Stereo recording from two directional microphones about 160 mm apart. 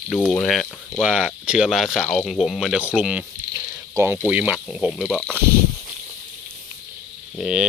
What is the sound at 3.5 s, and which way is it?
Cricket, 15° right (ahead or behind).